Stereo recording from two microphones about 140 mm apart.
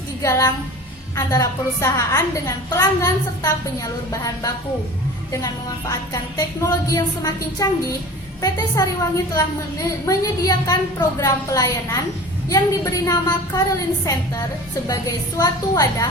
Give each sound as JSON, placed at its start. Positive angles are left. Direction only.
{"t": 0.2, "sound": "a woman's voice", "side_deg": 25}
{"t": 5.9, "sound": "a woman's voice", "side_deg": 25}